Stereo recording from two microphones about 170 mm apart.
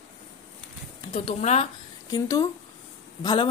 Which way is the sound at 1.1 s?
35° left (ahead or behind).